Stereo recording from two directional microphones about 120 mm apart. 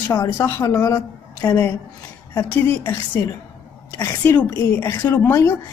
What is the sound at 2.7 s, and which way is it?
Speech, 20° left (ahead or behind).